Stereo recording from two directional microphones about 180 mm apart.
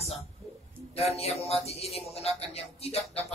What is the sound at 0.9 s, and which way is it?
Speech, 35° left (ahead or behind).